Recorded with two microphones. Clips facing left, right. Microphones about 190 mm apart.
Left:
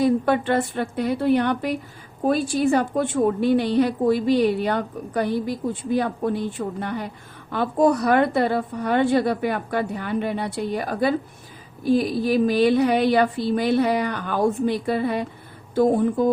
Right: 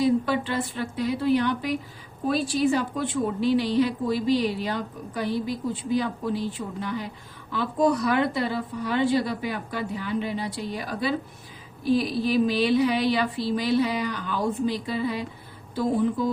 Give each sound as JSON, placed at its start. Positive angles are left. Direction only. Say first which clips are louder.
{"t": 0.0, "sound": "a woman's voice", "louder": "left 3 dB", "side_deg": 55}